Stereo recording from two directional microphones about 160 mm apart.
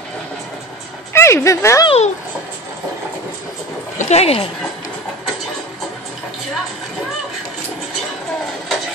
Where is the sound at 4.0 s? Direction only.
40° left (ahead or behind).